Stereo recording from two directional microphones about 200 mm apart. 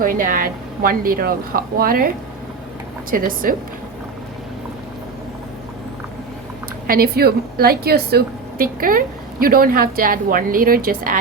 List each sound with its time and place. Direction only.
0.0 s a woman's voice: 45° right (ahead or behind)
3.1 s a woman's voice: 45° right (ahead or behind)
6.8 s a woman's voice: 50° right (ahead or behind)